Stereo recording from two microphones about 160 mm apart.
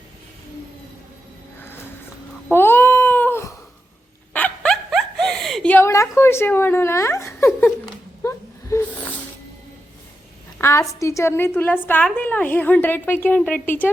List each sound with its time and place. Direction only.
1.5 s music: 15° left (ahead or behind)
2.5 s cat: 15° left (ahead or behind)
4.4 s snicker: 5° left (ahead or behind)
8.2 s a sound: 20° left (ahead or behind)
10.6 s a woman's voice: 20° left (ahead or behind)